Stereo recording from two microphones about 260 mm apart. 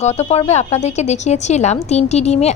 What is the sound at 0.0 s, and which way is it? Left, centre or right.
Speech, left.